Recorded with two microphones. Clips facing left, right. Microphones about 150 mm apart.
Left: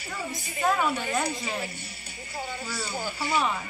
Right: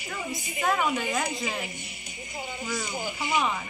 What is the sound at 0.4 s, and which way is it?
Speech, 15° right (ahead or behind).